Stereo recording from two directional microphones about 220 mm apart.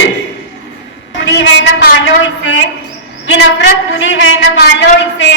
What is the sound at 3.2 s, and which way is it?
A woman's voice, 55° left (ahead or behind).